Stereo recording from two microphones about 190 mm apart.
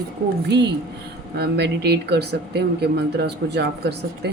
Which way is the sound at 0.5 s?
60° right (ahead or behind).